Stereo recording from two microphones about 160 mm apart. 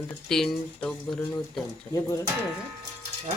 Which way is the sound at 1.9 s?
20° left (ahead or behind).